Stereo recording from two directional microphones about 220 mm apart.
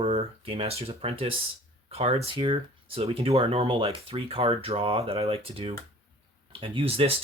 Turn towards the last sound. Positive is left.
turn(degrees=-25)  # may be behind; listen again after turning